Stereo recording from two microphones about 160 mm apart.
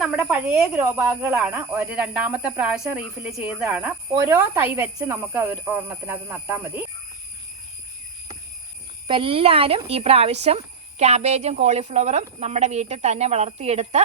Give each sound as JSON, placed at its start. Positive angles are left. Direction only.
{"t": 0.0, "sound": "speech", "side_deg": -5}
{"t": 9.0, "sound": "speech", "side_deg": -35}